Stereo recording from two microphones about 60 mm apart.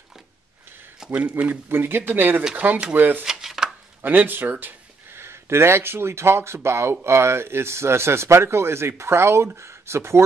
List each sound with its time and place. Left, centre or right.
1.0 s a sound: centre
1.4 s speech: right
3.3 s chopping: centre
4.0 s speech: right